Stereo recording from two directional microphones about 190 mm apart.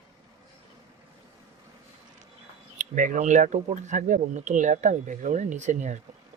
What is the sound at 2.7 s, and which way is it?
Speech, 45° right (ahead or behind).